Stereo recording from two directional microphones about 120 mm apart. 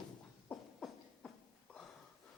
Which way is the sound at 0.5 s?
10° left (ahead or behind).